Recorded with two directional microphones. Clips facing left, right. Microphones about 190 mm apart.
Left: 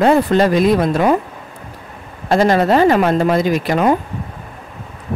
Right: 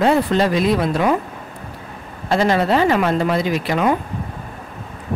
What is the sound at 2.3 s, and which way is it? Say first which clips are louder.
Speech: left 4 dB; 45° left (ahead or behind).